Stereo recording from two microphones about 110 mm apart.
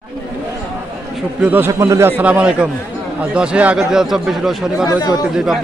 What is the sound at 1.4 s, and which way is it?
A man's voice, 15° right (ahead or behind).